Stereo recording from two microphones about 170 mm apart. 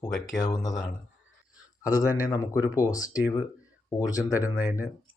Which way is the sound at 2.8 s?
20° left (ahead or behind).